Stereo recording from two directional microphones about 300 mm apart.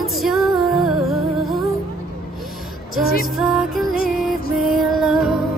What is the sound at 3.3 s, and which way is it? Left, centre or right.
Music, centre.